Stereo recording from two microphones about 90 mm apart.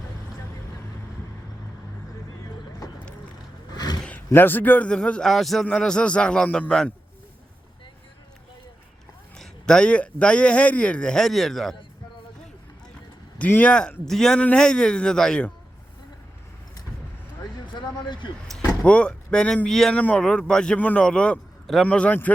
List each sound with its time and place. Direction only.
2.8 s boat: 40° left (ahead or behind)
3.8 s a sound: 50° left (ahead or behind)
4.3 s speech: 20° left (ahead or behind)
9.4 s speech: 10° left (ahead or behind)
13.4 s speech: 15° left (ahead or behind)
17.7 s a sound: 60° left (ahead or behind)
18.9 s speech: 15° left (ahead or behind)